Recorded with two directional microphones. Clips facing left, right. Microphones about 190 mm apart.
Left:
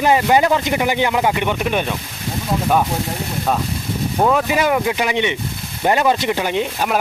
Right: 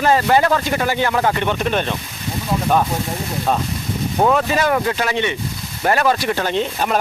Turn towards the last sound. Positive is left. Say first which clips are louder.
# even
turn(degrees=10)  # may be behind; listen again after turning